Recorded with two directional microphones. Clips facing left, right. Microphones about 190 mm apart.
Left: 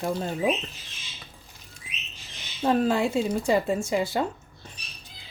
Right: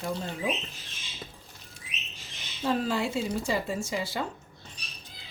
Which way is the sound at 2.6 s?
55° left (ahead or behind).